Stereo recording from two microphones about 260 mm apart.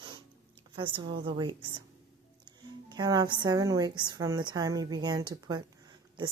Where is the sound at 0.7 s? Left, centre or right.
Centre.